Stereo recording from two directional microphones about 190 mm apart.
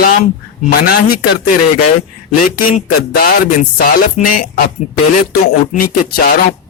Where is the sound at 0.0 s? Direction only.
50° left (ahead or behind).